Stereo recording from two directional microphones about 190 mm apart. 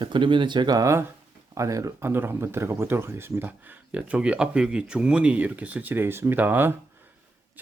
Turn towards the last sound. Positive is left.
turn(degrees=-10)  # may be behind; listen again after turning